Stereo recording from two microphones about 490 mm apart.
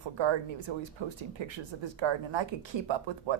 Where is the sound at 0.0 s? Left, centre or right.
Right.